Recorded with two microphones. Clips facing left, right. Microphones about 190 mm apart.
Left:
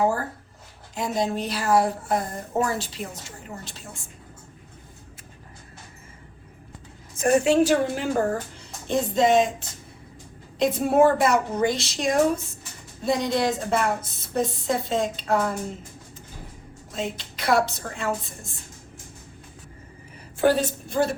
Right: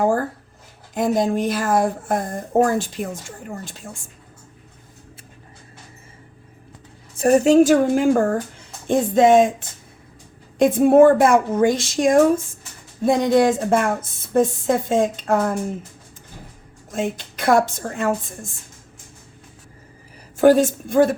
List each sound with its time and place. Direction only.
0.0 s a sound: 50° right (ahead or behind)
0.9 s a woman's voice: 50° right (ahead or behind)
7.2 s a woman's voice: 40° right (ahead or behind)
16.9 s a woman's voice: 50° right (ahead or behind)
20.4 s a woman's voice: 45° right (ahead or behind)